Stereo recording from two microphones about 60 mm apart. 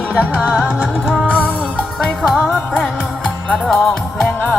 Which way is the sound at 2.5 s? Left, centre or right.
Left.